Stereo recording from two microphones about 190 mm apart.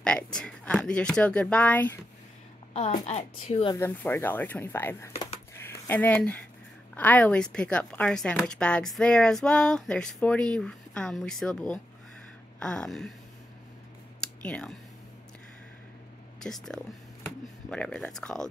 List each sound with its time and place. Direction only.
0.0 s speech: 5° left (ahead or behind)
2.7 s speech: 35° left (ahead or behind)
3.7 s speech: 15° left (ahead or behind)
5.1 s a sound: 30° left (ahead or behind)
5.6 s speech: 10° left (ahead or behind)
14.2 s speech: 5° left (ahead or behind)
16.3 s speech: centre (ahead or behind)